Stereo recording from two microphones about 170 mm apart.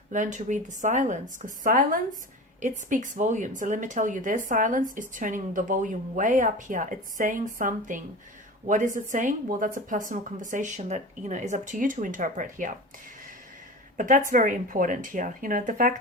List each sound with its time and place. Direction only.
0.1 s speech: 45° right (ahead or behind)
13.9 s speech: 50° right (ahead or behind)